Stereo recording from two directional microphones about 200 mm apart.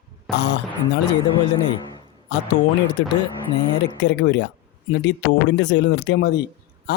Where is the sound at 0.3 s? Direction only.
60° left (ahead or behind).